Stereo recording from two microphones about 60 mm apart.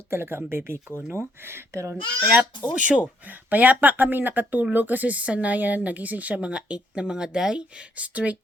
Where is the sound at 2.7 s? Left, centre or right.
Centre.